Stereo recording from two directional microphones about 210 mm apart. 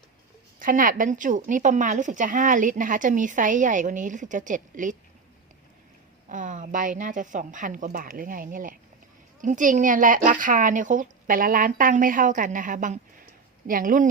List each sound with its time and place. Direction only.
0.6 s speech: 40° right (ahead or behind)
6.2 s speech: 35° right (ahead or behind)